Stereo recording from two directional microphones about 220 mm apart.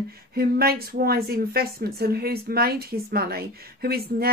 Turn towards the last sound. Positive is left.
turn(degrees=-45)  # may be behind; listen again after turning